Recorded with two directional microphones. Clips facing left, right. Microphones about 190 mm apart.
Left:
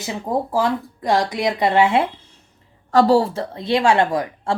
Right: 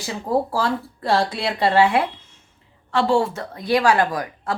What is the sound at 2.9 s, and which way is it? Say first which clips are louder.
Speech: left 4 dB; 40° left (ahead or behind).